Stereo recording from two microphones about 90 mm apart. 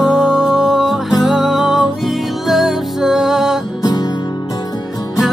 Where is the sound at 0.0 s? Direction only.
5° right (ahead or behind).